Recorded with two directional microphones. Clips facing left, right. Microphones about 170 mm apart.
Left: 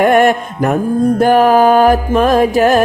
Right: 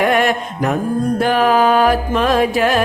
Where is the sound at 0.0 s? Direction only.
50° left (ahead or behind).